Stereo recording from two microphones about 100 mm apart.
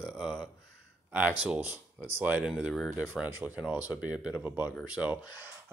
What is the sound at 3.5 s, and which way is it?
Speech, 10° right (ahead or behind).